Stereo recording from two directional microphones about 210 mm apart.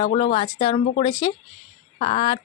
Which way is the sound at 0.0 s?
30° left (ahead or behind).